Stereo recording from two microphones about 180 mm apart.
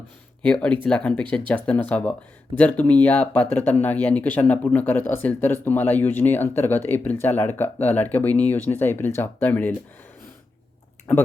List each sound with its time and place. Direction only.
0.4 s speech: 5° left (ahead or behind)
11.1 s speech: 10° left (ahead or behind)